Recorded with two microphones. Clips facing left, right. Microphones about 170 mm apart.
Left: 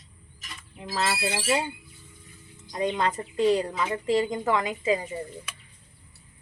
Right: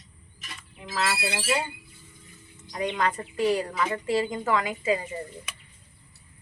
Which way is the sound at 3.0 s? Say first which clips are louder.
Right 1 dB; 20° left (ahead or behind).